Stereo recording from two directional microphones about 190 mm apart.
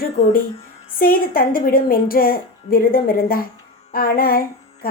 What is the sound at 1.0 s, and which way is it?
A woman's voice, 50° left (ahead or behind).